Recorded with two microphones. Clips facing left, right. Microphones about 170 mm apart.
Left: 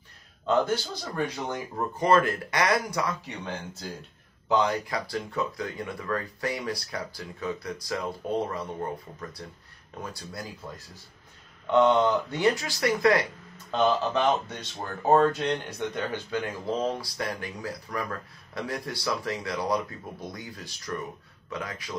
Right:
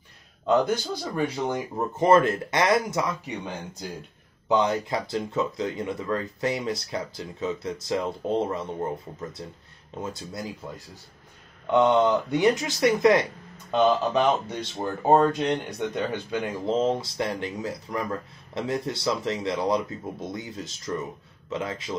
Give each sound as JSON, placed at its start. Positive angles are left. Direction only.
{"t": 0.5, "sound": "speech", "side_deg": -15}
{"t": 11.7, "sound": "speech", "side_deg": -15}